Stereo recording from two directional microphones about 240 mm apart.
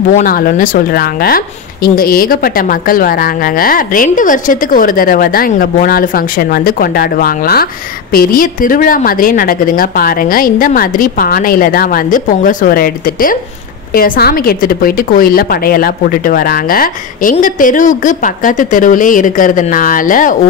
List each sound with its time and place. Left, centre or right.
0.1 s speech: left